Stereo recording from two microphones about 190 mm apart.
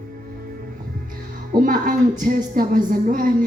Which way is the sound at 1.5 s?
45° right (ahead or behind).